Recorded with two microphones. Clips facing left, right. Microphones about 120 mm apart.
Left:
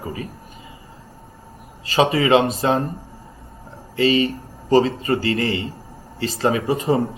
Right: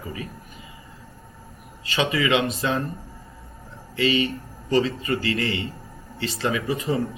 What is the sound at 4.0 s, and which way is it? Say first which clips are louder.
Speech: left 5 dB; 35° left (ahead or behind).